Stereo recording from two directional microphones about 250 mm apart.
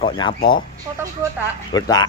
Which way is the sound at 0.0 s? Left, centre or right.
Left.